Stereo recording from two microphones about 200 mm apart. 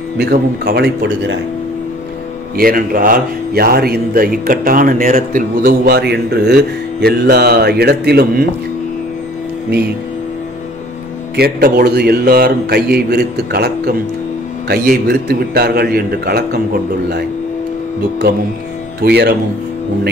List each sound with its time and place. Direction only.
0.2 s a man's voice: 50° right (ahead or behind)
2.5 s a man's voice: 45° right (ahead or behind)
11.3 s a man's voice: 50° right (ahead or behind)
18.9 s a man's voice: 50° right (ahead or behind)